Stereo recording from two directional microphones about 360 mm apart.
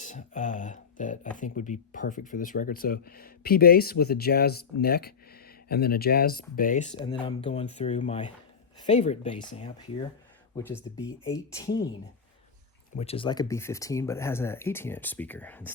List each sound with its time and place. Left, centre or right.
0.0 s speech: centre
10.9 s speech: centre
13.0 s speech: centre